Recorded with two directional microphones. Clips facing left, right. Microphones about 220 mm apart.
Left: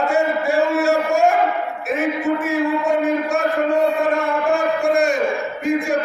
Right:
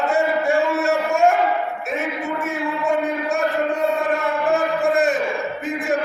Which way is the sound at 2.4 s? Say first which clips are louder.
Left 5 dB; centre (ahead or behind).